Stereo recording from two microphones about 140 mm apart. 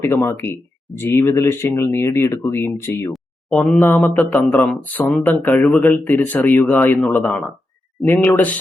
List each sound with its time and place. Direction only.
0.0 s speech: 15° left (ahead or behind)